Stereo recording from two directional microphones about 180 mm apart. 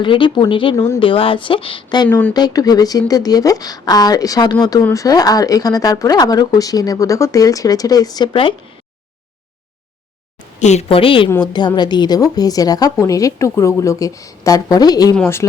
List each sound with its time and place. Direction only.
0.0 s speech: 25° left (ahead or behind)
2.0 s speech: 5° left (ahead or behind)
2.3 s speech: 20° left (ahead or behind)
10.6 s a woman's voice: 40° left (ahead or behind); by 15.4 s 10° left (ahead or behind)